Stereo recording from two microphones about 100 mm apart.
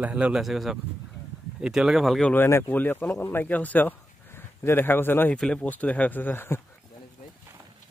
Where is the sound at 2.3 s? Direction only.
20° left (ahead or behind).